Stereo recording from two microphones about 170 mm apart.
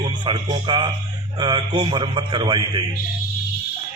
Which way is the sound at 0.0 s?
30° right (ahead or behind).